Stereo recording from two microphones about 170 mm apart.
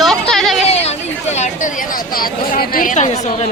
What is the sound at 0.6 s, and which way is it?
Speech, 40° left (ahead or behind).